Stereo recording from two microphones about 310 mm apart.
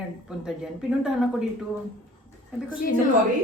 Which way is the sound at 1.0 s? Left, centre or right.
Centre.